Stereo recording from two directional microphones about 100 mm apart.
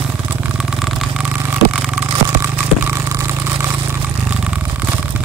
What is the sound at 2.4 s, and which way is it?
Vehicle, 25° right (ahead or behind).